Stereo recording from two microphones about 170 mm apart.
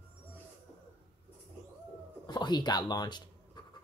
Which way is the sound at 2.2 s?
25° left (ahead or behind).